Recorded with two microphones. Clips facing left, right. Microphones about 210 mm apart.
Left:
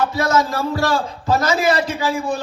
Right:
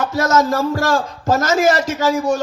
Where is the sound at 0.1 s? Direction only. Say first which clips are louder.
Right 2 dB; 45° right (ahead or behind).